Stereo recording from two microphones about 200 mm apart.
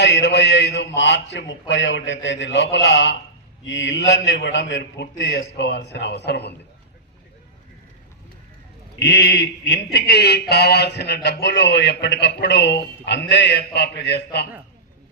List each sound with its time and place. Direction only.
0.0 s a man's voice: 60° left (ahead or behind)
9.0 s a man's voice: 55° left (ahead or behind)